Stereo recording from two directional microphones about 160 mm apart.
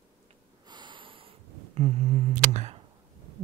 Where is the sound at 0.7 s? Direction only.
30° right (ahead or behind).